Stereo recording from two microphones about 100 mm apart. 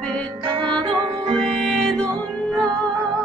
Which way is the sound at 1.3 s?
5° left (ahead or behind).